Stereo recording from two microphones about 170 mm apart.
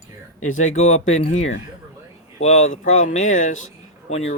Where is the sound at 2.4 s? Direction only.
40° left (ahead or behind).